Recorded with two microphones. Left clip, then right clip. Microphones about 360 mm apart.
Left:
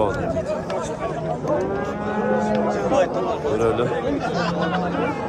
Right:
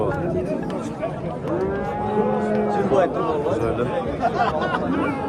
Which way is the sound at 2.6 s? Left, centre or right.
Right.